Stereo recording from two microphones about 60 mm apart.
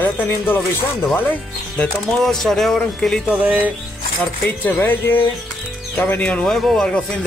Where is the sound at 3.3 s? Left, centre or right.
Right.